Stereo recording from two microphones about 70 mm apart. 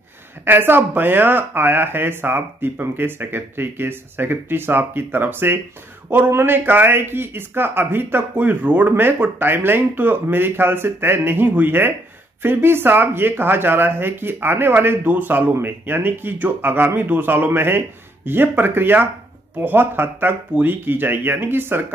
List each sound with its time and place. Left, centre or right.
0.5 s a man's voice: right